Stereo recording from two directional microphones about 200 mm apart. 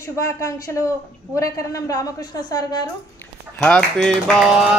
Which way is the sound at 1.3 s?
15° left (ahead or behind).